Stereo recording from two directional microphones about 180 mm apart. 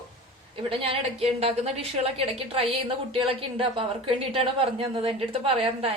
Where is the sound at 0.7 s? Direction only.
30° right (ahead or behind).